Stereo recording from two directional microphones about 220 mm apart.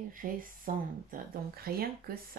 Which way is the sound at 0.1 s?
40° right (ahead or behind).